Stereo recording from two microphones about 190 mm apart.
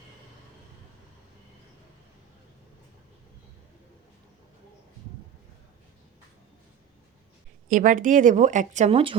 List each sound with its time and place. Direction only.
7.7 s speech: 45° right (ahead or behind)